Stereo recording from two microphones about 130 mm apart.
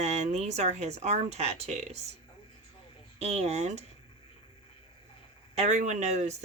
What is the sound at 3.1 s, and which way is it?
Speech, 60° right (ahead or behind).